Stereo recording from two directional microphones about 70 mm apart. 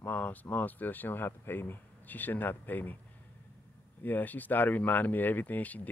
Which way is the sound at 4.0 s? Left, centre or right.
Left.